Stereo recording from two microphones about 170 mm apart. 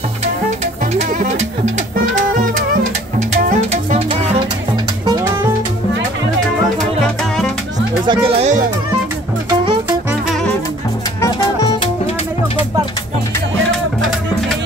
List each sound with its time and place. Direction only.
3.2 s music: 45° right (ahead or behind)
5.0 s music: 20° right (ahead or behind)
8.1 s speech: 30° right (ahead or behind)
11.1 s music: 25° left (ahead or behind)